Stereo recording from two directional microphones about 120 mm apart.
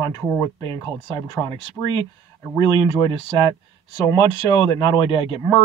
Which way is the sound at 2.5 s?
40° left (ahead or behind).